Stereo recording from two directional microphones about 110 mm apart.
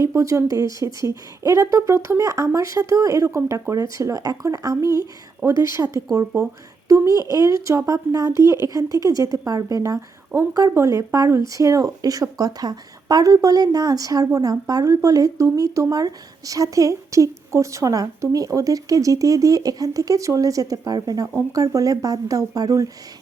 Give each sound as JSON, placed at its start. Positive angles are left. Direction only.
{"t": 0.0, "sound": "a woman's voice", "side_deg": -30}